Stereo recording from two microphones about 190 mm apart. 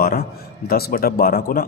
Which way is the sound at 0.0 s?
55° left (ahead or behind).